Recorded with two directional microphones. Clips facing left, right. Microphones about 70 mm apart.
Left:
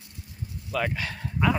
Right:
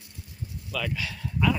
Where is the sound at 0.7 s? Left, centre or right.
Left.